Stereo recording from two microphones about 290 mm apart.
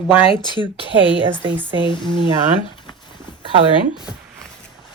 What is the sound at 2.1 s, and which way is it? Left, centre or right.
Speech, right.